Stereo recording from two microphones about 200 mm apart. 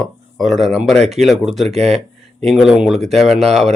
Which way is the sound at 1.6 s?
30° right (ahead or behind).